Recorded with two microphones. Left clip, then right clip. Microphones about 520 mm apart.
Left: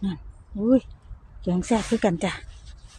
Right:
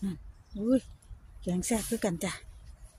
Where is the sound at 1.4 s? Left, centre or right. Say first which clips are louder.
Left 8 dB; right.